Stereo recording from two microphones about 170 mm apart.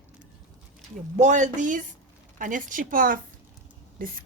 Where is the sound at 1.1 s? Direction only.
45° right (ahead or behind).